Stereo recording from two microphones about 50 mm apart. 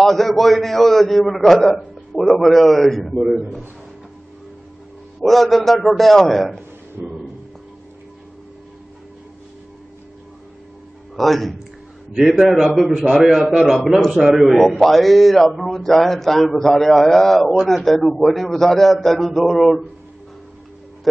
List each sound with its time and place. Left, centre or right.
0.0 s a man's voice: centre
5.2 s a man's voice: centre
7.0 s speech: right
11.1 s a man's voice: centre